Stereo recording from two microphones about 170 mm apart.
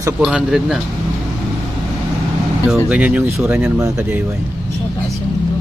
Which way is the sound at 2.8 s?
5° right (ahead or behind).